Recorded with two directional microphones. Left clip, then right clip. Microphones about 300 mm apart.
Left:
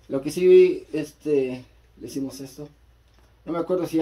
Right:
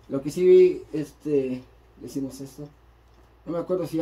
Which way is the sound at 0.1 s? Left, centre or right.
Right.